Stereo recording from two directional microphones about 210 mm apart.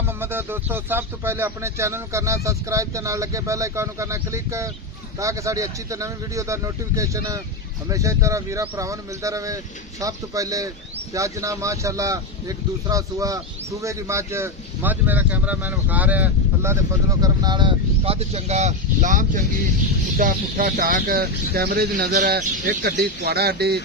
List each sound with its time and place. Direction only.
0.2 s speech: 10° right (ahead or behind); by 22.4 s 40° right (ahead or behind)
22.4 s speech: 50° right (ahead or behind)